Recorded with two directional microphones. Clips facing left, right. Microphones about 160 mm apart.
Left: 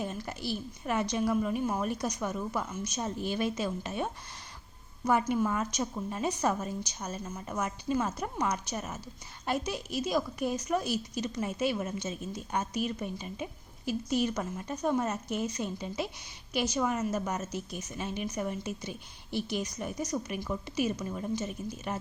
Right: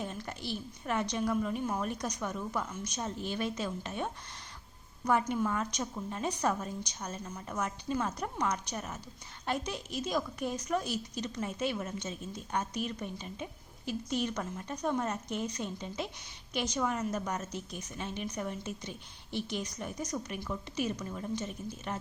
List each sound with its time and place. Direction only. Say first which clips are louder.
0.0 s a woman's voice: left 3 dB; 10° left (ahead or behind)